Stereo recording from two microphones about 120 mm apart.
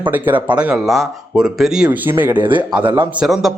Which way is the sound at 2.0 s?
15° right (ahead or behind).